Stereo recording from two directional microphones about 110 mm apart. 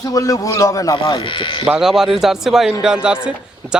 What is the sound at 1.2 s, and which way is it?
Speech, 50° left (ahead or behind).